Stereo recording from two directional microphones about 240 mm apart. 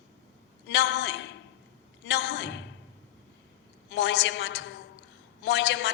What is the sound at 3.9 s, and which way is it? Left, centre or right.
Speech, left.